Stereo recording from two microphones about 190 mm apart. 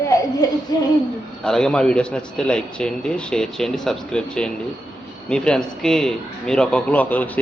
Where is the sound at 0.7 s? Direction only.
20° left (ahead or behind).